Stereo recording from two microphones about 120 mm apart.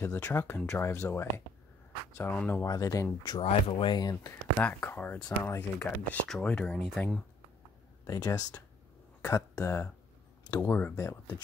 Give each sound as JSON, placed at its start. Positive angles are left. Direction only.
{"t": 0.0, "sound": "speech", "side_deg": 20}
{"t": 2.3, "sound": "speech", "side_deg": 15}
{"t": 2.6, "sound": "speech", "side_deg": 30}
{"t": 3.3, "sound": "speech", "side_deg": 50}
{"t": 4.1, "sound": "speech", "side_deg": 25}
{"t": 8.1, "sound": "speech", "side_deg": 30}
{"t": 10.7, "sound": "speech", "side_deg": 15}